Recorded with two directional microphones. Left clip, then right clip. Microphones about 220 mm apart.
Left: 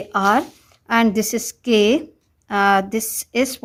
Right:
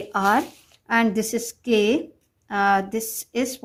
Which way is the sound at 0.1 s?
25° left (ahead or behind).